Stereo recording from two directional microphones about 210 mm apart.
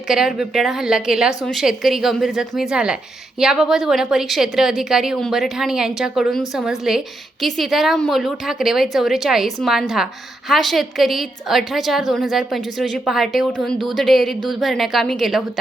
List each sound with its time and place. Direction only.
0.1 s a woman's voice: centre (ahead or behind)